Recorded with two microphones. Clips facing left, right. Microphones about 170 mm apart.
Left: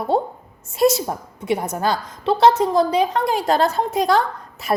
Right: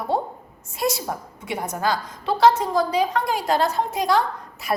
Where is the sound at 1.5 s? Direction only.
20° left (ahead or behind).